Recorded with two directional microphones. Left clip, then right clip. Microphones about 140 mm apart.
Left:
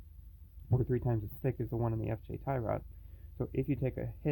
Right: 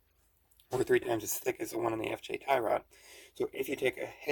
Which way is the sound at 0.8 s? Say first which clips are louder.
Right 8 dB; 30° right (ahead or behind).